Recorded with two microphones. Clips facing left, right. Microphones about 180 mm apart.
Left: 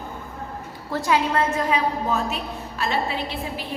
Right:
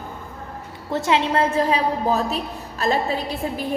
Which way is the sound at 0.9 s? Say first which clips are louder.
Right 2 dB; 25° right (ahead or behind).